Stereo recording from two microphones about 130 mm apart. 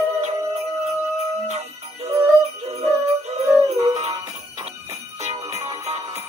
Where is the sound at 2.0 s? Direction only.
55° right (ahead or behind).